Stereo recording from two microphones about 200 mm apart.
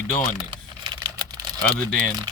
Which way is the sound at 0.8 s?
20° right (ahead or behind).